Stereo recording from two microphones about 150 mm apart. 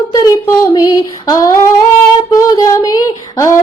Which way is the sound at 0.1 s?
25° left (ahead or behind).